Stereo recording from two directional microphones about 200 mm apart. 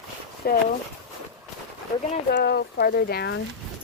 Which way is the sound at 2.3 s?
55° left (ahead or behind).